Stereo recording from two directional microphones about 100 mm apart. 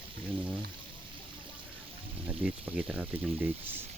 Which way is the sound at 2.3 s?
10° right (ahead or behind).